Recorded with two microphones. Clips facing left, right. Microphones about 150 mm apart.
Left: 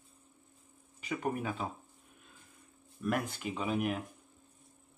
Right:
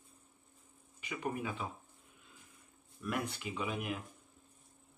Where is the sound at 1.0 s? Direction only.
40° left (ahead or behind).